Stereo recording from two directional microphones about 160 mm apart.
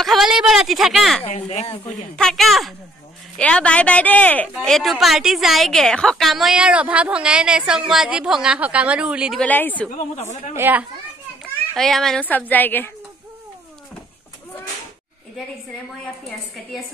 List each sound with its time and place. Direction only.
0.0 s a sound: centre (ahead or behind)
1.2 s speech: 40° left (ahead or behind)
2.1 s speech: 5° left (ahead or behind)
9.4 s speech: 10° left (ahead or behind)
10.5 s a child's voice: 10° right (ahead or behind)
11.7 s speech: centre (ahead or behind)